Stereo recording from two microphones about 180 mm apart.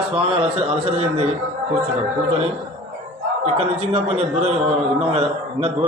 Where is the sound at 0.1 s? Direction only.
35° right (ahead or behind).